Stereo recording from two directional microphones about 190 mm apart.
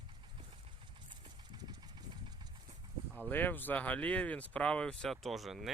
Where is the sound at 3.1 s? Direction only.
10° left (ahead or behind).